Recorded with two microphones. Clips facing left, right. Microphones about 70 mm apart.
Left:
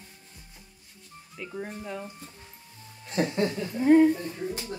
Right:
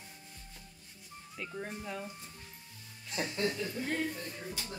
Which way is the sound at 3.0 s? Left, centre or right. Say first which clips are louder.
Left 10 dB; left.